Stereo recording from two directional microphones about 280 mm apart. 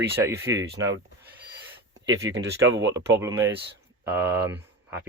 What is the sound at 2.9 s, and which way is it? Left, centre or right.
Speech, centre.